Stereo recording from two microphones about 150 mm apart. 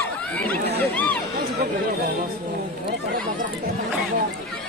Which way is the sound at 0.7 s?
10° left (ahead or behind).